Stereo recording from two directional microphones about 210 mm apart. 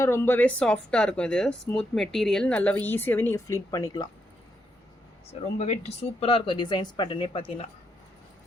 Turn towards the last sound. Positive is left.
turn(degrees=25)  # may be behind; listen again after turning